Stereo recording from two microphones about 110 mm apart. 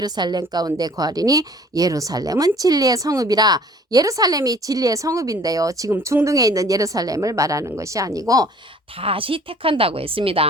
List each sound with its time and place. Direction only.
0.0 s a woman's voice: 40° right (ahead or behind)
9.0 s a woman's voice: 55° right (ahead or behind)